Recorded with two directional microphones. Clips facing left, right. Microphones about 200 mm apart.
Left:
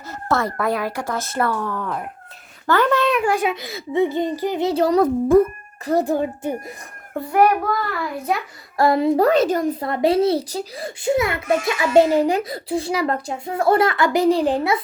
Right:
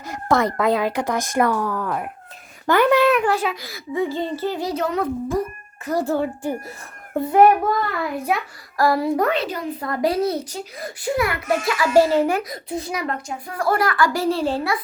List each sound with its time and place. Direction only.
0.1 s a woman's voice: 15° right (ahead or behind)
3.2 s a child's voice: 15° left (ahead or behind); by 5.0 s 35° left (ahead or behind)
5.3 s a child's voice: 55° left (ahead or behind)
5.8 s a child's voice: 25° left (ahead or behind)
7.1 s a child's voice: 20° right (ahead or behind)
8.8 s a child's voice: 20° left (ahead or behind)
9.2 s a woman's voice: 45° left (ahead or behind)
9.8 s a child's voice: 25° left (ahead or behind)
12.5 s a child's voice: 30° left (ahead or behind)